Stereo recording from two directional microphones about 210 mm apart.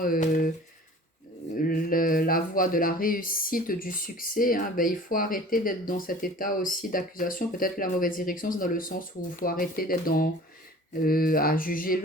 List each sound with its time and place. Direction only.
0.0 s speech: 40° left (ahead or behind)
1.5 s speech: 40° left (ahead or behind)
11.0 s mantra: 45° left (ahead or behind)